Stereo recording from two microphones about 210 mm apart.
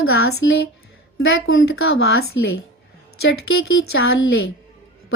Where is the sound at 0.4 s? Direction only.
65° left (ahead or behind).